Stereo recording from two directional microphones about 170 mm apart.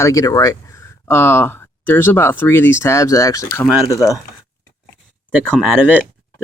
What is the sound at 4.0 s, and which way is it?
Speech, 5° right (ahead or behind).